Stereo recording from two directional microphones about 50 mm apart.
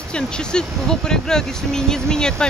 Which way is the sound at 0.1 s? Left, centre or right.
Centre.